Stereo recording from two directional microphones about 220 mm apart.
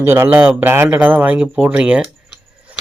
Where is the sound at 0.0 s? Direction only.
10° right (ahead or behind).